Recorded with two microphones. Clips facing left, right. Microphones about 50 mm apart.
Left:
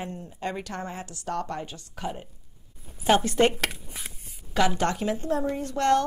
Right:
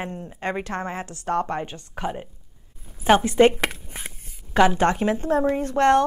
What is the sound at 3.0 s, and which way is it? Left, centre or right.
Speech, right.